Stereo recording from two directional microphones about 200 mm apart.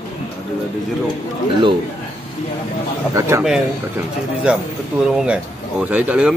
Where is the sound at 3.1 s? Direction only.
15° right (ahead or behind).